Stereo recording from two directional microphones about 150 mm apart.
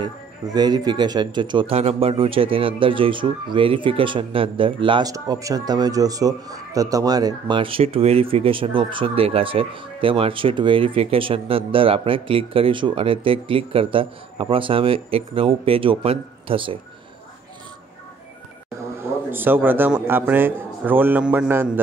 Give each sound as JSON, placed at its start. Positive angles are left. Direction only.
{"t": 0.0, "sound": "speech", "side_deg": -25}
{"t": 5.1, "sound": "speech", "side_deg": -25}
{"t": 19.3, "sound": "a man's voice", "side_deg": -15}